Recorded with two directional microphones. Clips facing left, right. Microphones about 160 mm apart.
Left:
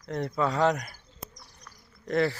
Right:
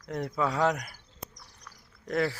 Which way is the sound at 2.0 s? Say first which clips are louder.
Left 3 dB; 5° right (ahead or behind).